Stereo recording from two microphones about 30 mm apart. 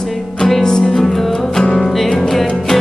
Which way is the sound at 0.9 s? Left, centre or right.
Centre.